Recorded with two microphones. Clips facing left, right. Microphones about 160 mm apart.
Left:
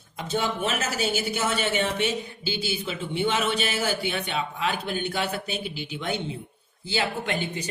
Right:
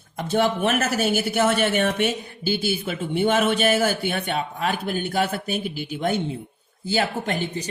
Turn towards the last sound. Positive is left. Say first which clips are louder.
# right 3 dB
turn(degrees=-40)  # may be behind; listen again after turning